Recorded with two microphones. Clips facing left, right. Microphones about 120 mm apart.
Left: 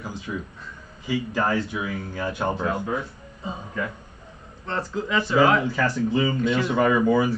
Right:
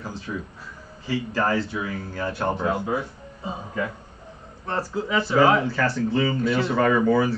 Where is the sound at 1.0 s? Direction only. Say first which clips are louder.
Even; 15° left (ahead or behind).